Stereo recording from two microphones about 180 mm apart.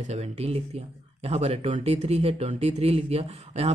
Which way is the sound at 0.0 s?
35° right (ahead or behind).